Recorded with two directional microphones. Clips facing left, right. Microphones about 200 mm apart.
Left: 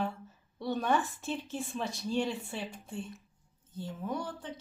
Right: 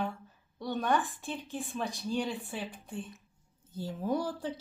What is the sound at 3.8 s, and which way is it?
Speech, 35° right (ahead or behind).